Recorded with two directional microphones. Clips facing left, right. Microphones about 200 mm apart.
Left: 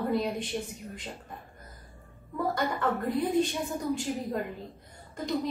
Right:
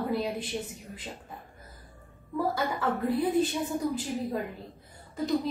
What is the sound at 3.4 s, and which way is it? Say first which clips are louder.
A woman's voice: right 2 dB; centre (ahead or behind).